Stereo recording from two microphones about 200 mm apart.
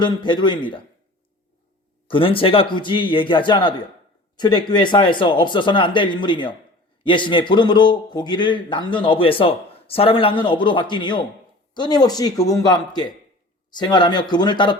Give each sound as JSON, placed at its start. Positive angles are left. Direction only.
{"t": 0.0, "sound": "a man's voice", "side_deg": 20}
{"t": 2.0, "sound": "a man's voice", "side_deg": 25}